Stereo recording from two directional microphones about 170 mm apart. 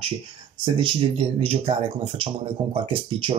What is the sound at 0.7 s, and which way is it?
Speech, 35° right (ahead or behind).